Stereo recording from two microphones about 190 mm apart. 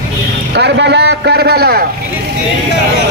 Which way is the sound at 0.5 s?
65° right (ahead or behind).